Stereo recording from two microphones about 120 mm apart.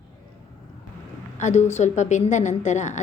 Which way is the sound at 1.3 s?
75° left (ahead or behind).